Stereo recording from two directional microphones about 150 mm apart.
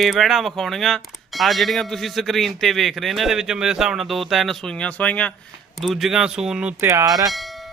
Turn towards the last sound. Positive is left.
turn(degrees=0)  # may be behind; listen again after turning